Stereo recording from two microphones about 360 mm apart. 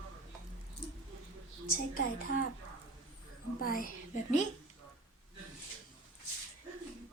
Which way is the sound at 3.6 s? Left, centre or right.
Left.